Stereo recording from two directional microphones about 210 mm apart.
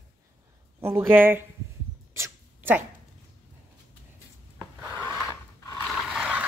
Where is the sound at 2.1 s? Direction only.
10° right (ahead or behind).